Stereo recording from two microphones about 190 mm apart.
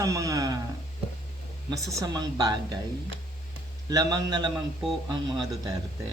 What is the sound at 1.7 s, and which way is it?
Speech, 15° right (ahead or behind).